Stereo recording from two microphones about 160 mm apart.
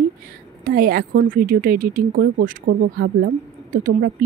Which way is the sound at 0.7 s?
65° right (ahead or behind).